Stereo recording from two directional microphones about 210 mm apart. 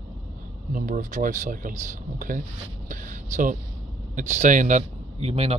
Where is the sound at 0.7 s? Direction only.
40° right (ahead or behind).